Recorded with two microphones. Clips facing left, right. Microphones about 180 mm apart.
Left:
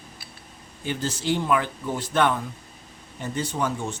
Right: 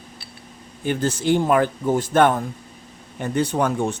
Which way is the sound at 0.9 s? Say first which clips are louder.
Right 6 dB; 55° right (ahead or behind).